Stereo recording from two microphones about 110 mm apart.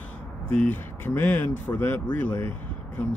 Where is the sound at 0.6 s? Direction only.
15° left (ahead or behind).